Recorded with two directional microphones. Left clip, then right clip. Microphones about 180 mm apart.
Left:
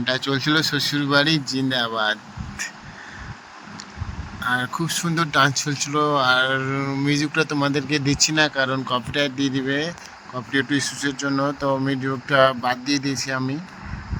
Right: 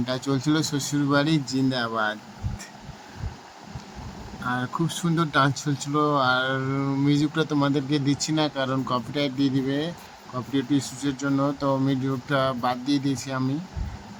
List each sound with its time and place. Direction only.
0.0 s speech: 15° left (ahead or behind)
4.4 s speech: 20° left (ahead or behind); by 9.9 s centre (ahead or behind)
10.5 s speech: 15° left (ahead or behind)